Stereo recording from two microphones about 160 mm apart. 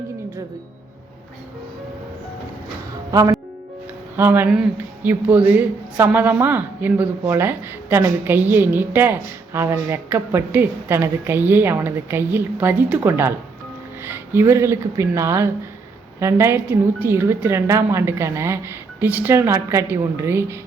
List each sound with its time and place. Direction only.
3.1 s speech: 20° right (ahead or behind)